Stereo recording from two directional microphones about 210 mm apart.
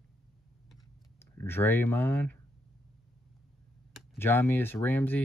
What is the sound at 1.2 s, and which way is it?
Speech, 10° left (ahead or behind).